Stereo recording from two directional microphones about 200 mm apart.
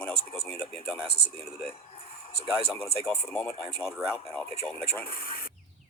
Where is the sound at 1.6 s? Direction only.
30° left (ahead or behind).